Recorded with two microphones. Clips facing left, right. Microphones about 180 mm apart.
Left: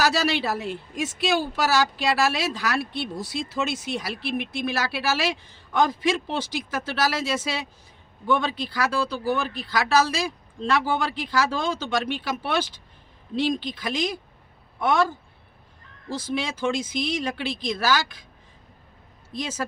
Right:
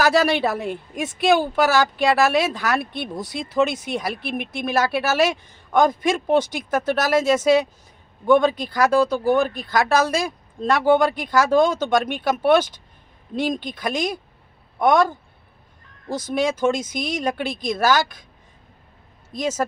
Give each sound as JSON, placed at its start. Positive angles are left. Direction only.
{"t": 0.0, "sound": "a woman's voice", "side_deg": -50}
{"t": 19.3, "sound": "a woman's voice", "side_deg": -45}